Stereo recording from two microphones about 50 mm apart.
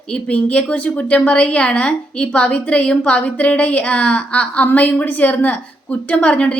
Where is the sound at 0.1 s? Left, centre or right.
Left.